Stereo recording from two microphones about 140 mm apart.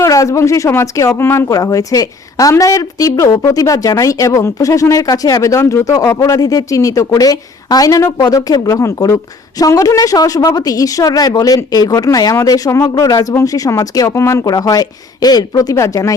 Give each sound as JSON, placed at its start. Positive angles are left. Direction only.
{"t": 0.0, "sound": "a woman's voice", "side_deg": 20}